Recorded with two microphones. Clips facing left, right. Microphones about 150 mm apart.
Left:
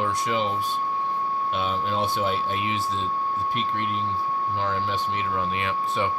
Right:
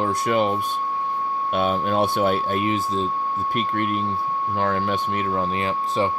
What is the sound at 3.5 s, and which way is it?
Speech, 55° right (ahead or behind).